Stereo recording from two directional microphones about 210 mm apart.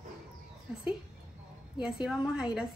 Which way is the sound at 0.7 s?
5° right (ahead or behind).